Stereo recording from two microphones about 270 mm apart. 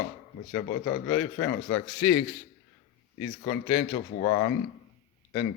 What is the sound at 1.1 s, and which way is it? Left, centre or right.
Speech, centre.